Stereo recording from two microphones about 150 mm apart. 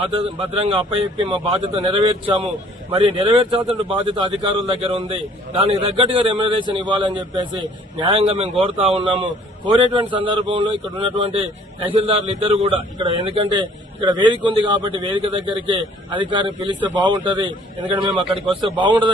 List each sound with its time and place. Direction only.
0.0 s speech: 35° right (ahead or behind)